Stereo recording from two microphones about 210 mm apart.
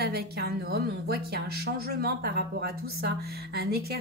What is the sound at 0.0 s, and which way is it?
A woman's voice, 50° right (ahead or behind).